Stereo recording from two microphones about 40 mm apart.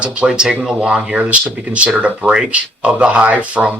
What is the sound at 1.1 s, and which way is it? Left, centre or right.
Speech, right.